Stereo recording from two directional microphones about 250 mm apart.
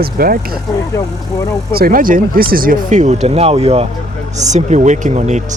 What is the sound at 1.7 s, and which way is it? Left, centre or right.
Speech, right.